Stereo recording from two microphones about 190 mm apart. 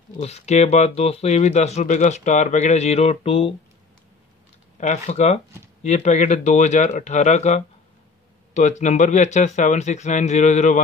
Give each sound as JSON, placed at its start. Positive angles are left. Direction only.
{"t": 0.2, "sound": "speech", "side_deg": 35}
{"t": 4.7, "sound": "speech", "side_deg": 40}